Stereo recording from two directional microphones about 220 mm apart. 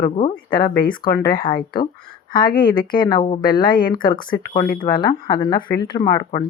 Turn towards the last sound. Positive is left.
turn(degrees=20)  # may be behind; listen again after turning